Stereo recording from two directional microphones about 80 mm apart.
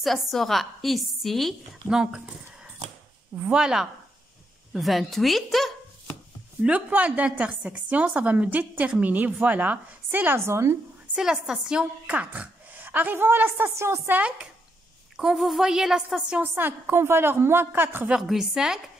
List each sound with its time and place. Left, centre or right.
0.0 s a woman's voice: centre
6.6 s a woman's voice: centre; by 10.8 s right
11.1 s a woman's voice: centre; by 14.2 s right
15.1 s a woman's voice: centre
16.4 s a woman's voice: right
18.2 s a woman's voice: centre